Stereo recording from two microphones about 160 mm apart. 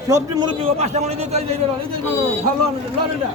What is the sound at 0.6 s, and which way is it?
Speech, 45° right (ahead or behind).